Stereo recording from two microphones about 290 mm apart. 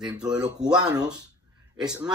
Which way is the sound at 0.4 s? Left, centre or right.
Centre.